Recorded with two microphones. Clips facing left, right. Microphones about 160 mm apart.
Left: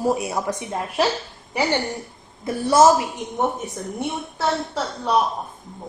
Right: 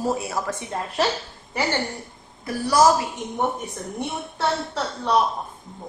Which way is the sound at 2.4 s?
25° left (ahead or behind).